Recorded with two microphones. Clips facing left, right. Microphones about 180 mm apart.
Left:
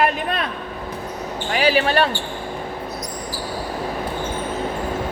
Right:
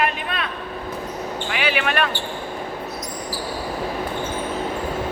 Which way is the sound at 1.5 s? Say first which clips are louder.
Left 6 dB; 35° left (ahead or behind).